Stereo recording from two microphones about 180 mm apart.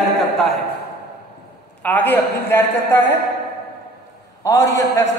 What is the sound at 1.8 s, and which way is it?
A man's voice, 10° left (ahead or behind).